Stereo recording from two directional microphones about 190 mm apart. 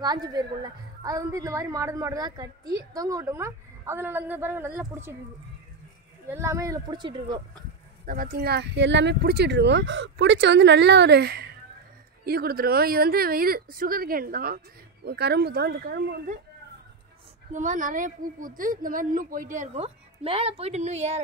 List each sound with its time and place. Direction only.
0.0 s a woman's voice: 20° right (ahead or behind)
6.2 s a woman's voice: 15° right (ahead or behind)
8.0 s a woman's voice: 45° right (ahead or behind)
17.5 s a woman's voice: 40° right (ahead or behind)